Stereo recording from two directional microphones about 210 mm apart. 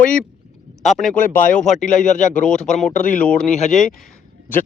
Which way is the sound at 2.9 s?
35° left (ahead or behind).